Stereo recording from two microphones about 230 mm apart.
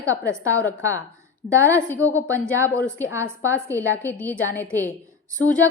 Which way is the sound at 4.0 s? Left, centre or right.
Centre.